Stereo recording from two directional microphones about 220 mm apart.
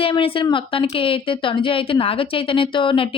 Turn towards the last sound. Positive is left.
turn(degrees=25)  # may be behind; listen again after turning